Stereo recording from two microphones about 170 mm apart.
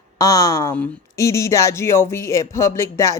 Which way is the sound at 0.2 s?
20° left (ahead or behind).